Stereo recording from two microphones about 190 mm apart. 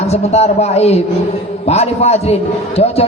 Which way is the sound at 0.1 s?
35° left (ahead or behind).